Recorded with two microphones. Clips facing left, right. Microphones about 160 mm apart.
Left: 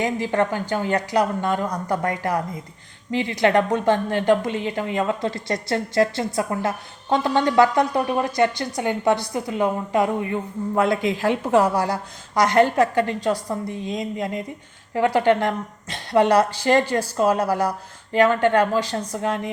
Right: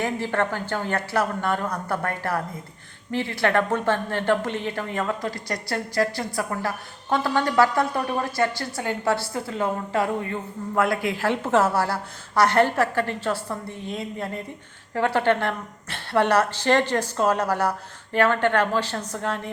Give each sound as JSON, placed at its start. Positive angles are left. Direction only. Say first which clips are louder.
{"t": 0.0, "sound": "a woman's voice", "louder": "left 3 dB", "side_deg": 15}